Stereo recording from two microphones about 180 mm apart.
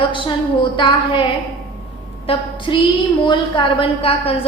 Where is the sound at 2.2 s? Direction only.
30° left (ahead or behind).